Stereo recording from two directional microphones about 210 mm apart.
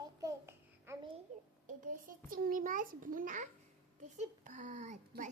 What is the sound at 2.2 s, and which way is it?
A child's voice, 45° right (ahead or behind).